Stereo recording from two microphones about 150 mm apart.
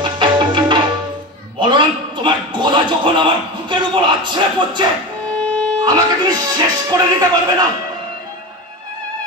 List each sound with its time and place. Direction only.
0.0 s tabla: 30° right (ahead or behind)
1.6 s a man's voice: 30° right (ahead or behind)